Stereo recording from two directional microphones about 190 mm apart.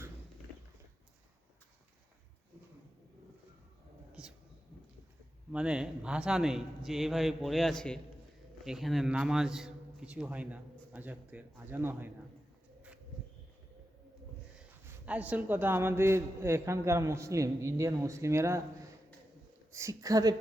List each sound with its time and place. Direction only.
4.1 s a sound: 5° right (ahead or behind)
5.5 s a man's voice: 5° right (ahead or behind)
14.6 s a man's voice: 5° right (ahead or behind)
19.7 s a man's voice: 15° right (ahead or behind)